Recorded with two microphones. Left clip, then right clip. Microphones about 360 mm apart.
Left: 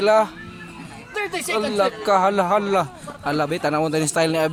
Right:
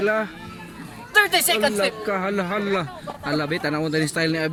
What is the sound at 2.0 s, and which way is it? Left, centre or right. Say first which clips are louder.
Speech: left 7 dB; centre.